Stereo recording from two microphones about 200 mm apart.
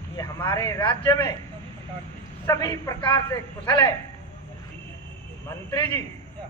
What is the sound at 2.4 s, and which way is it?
A man's voice, 15° left (ahead or behind).